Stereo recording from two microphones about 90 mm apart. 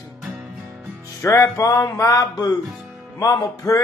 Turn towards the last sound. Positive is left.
turn(degrees=40)  # may be behind; listen again after turning